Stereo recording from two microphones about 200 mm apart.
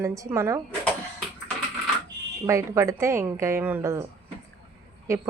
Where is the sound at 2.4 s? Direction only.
15° right (ahead or behind).